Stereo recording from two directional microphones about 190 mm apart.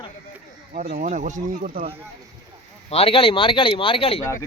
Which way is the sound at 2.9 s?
30° left (ahead or behind).